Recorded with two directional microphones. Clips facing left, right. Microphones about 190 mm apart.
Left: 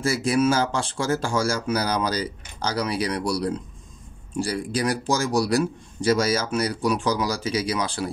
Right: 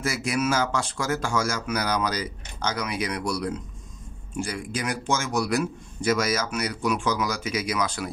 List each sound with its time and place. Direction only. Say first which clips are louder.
0.0 s a man's voice: left 5 dB; 30° left (ahead or behind)